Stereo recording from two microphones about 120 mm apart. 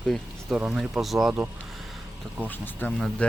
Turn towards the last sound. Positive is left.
turn(degrees=15)  # may be behind; listen again after turning